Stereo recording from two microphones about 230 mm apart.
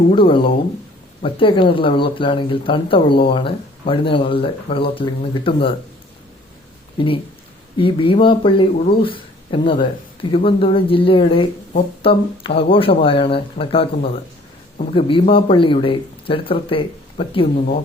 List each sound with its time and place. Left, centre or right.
0.1 s speech: left
7.8 s speech: left